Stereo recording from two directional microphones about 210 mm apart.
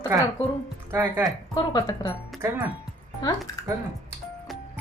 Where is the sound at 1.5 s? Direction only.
20° left (ahead or behind).